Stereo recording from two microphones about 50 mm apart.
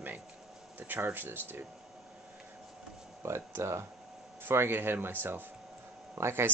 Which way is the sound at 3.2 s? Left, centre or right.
Right.